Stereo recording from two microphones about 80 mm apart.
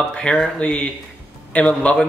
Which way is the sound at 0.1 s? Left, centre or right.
Centre.